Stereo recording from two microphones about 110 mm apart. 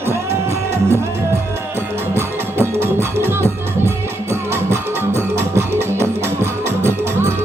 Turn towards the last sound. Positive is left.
turn(degrees=-25)  # may be behind; listen again after turning